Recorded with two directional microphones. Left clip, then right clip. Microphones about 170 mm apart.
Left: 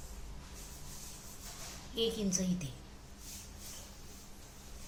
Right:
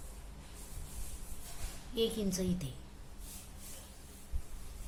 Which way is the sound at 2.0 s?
35° right (ahead or behind).